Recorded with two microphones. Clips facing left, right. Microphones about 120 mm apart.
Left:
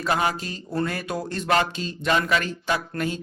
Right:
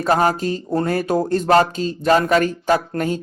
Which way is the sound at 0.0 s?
40° right (ahead or behind).